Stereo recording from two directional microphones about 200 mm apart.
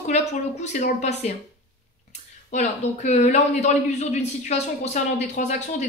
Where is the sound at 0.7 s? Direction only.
35° left (ahead or behind).